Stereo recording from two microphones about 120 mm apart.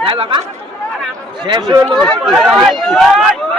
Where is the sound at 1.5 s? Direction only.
35° right (ahead or behind).